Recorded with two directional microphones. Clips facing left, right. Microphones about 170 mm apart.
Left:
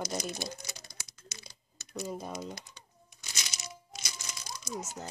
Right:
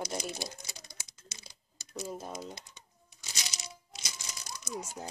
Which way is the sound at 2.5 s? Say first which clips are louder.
Left 3 dB; 25° right (ahead or behind).